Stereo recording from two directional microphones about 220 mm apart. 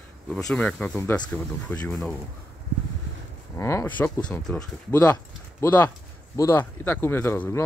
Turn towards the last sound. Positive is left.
turn(degrees=10)  # may be behind; listen again after turning